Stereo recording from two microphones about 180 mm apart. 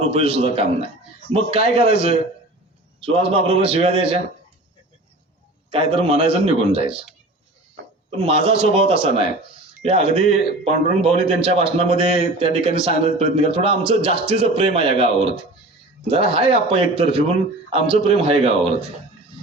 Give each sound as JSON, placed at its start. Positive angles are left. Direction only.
{"t": 0.0, "sound": "a man's voice", "side_deg": -35}
{"t": 3.0, "sound": "a man's voice", "side_deg": -30}
{"t": 5.7, "sound": "a man's voice", "side_deg": -30}
{"t": 8.2, "sound": "a man's voice", "side_deg": -30}